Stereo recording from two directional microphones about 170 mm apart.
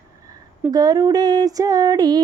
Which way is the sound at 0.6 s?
20° right (ahead or behind).